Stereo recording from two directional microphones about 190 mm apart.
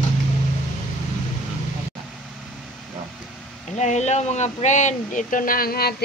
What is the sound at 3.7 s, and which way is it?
Speech, 35° left (ahead or behind).